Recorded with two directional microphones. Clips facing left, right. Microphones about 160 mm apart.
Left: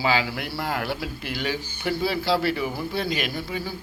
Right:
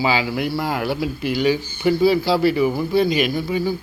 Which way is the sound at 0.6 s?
5° right (ahead or behind).